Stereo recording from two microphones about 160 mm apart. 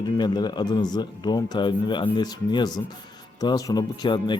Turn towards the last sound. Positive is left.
turn(degrees=25)  # may be behind; listen again after turning